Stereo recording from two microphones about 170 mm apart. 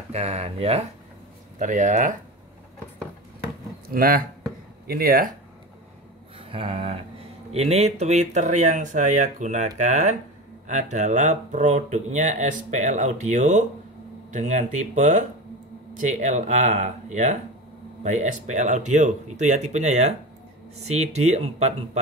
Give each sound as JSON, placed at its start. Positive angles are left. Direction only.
{"t": 0.1, "sound": "speech", "side_deg": -40}
{"t": 3.9, "sound": "speech", "side_deg": -55}
{"t": 6.3, "sound": "a sound", "side_deg": -30}
{"t": 7.5, "sound": "speech", "side_deg": -40}